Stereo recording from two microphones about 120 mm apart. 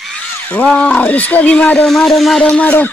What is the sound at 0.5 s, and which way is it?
Speech, 10° left (ahead or behind).